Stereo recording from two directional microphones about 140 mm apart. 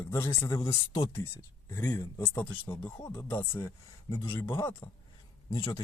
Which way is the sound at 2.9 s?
25° left (ahead or behind).